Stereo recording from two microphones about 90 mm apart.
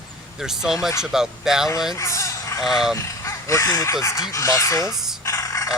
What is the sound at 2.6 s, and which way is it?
Speech, centre (ahead or behind).